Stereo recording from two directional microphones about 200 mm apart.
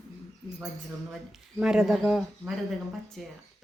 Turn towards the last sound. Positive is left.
turn(degrees=0)  # may be behind; listen again after turning